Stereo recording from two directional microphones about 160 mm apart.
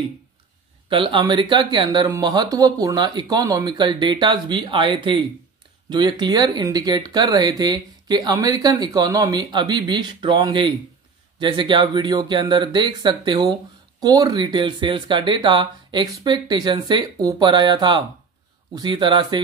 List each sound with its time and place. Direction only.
0.8 s speech: 35° right (ahead or behind)